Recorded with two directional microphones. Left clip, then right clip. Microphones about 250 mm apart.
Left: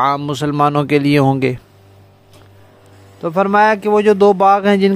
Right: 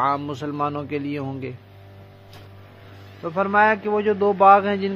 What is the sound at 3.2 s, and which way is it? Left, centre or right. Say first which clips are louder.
Speech: left 6 dB; left.